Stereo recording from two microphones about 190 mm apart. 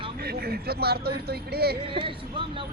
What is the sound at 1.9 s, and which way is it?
Speech, 25° right (ahead or behind).